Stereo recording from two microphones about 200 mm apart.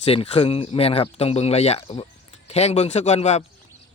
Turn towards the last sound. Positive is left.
turn(degrees=35)  # may be behind; listen again after turning